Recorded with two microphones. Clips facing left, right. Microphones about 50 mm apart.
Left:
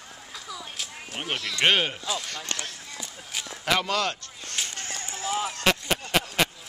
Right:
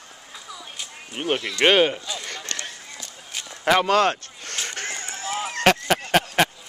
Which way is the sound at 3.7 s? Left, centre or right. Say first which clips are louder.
Right 7 dB; right.